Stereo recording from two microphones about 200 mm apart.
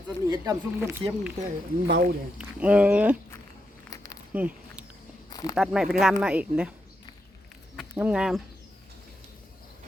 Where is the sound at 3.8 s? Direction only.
15° left (ahead or behind).